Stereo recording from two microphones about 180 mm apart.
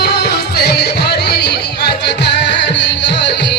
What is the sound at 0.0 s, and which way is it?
Music, 65° left (ahead or behind).